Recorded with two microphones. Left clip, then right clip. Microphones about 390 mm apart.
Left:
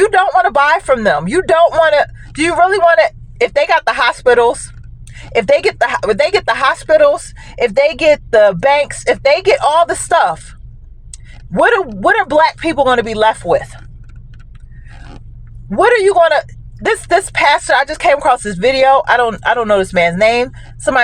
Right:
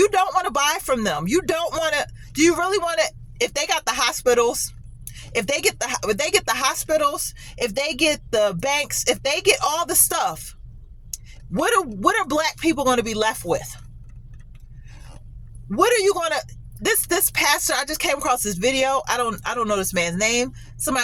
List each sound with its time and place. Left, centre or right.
0.1 s speech: right
11.6 s speech: right
15.7 s speech: right